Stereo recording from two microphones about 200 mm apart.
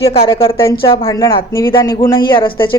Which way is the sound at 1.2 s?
15° left (ahead or behind).